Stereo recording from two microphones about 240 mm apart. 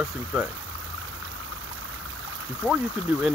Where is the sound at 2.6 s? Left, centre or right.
Centre.